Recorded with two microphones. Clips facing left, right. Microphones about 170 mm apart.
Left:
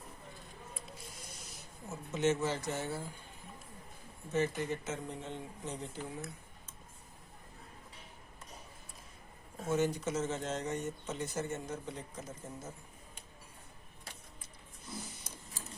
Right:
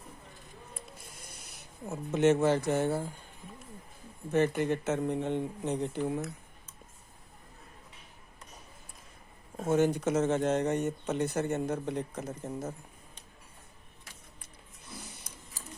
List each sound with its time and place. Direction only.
1.5 s speech: 60° right (ahead or behind)
4.3 s speech: 60° right (ahead or behind)
9.6 s speech: 55° right (ahead or behind)